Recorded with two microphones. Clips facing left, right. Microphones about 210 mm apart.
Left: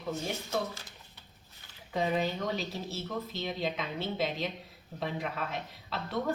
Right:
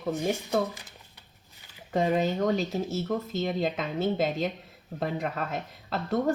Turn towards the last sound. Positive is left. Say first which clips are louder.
# right 6 dB
turn(degrees=-45)  # may be behind; listen again after turning